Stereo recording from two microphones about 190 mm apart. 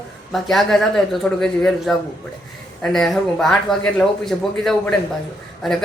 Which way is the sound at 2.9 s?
Centre (ahead or behind).